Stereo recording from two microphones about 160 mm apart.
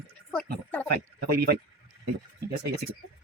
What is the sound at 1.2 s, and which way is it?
Speech, 80° right.